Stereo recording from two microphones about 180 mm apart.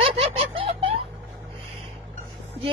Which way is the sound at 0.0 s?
30° right (ahead or behind).